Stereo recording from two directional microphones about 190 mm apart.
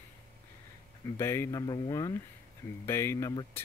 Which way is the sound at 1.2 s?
15° left (ahead or behind).